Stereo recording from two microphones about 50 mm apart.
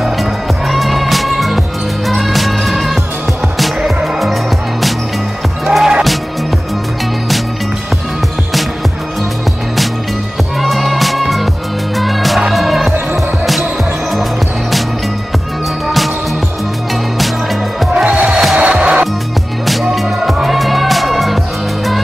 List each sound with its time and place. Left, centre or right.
0.2 s music: centre
5.7 s music: centre
10.6 s music: centre
17.9 s music: right
19.6 s music: centre